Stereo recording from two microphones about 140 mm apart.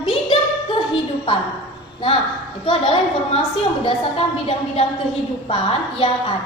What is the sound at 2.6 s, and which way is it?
Speech, 40° left (ahead or behind).